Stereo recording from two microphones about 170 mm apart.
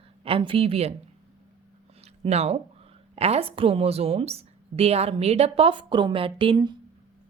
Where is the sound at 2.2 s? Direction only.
40° right (ahead or behind).